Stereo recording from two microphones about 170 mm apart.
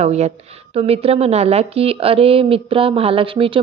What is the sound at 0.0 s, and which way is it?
A woman's voice, 40° right (ahead or behind).